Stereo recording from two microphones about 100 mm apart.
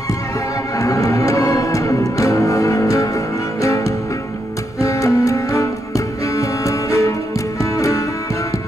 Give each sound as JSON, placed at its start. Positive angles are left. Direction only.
{"t": 0.7, "sound": "music", "side_deg": 35}